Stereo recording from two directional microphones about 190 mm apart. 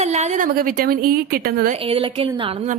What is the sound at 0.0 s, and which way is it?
A woman's voice, 35° right (ahead or behind).